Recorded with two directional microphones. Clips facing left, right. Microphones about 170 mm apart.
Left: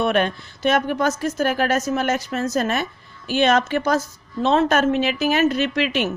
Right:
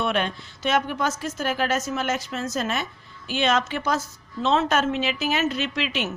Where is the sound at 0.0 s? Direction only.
55° left (ahead or behind).